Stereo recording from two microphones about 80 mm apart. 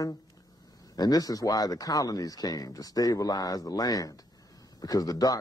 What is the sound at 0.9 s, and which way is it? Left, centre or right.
A man's voice, left.